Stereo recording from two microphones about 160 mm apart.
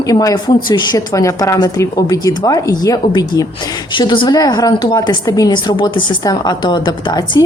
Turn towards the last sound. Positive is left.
turn(degrees=25)  # may be behind; listen again after turning